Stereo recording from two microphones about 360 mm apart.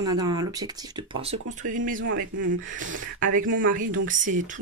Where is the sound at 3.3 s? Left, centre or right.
Right.